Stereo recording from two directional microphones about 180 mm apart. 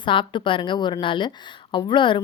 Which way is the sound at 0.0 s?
25° left (ahead or behind).